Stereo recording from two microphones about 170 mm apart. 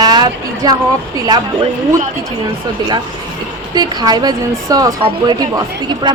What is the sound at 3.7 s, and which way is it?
Speech, 25° right (ahead or behind).